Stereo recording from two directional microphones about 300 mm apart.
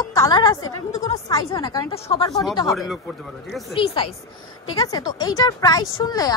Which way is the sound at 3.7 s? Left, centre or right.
Centre.